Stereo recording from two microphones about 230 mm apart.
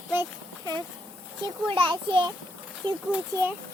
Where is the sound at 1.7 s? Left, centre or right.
Right.